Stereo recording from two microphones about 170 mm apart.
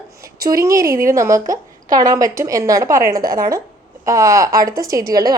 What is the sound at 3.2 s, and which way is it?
Speech, 55° right (ahead or behind).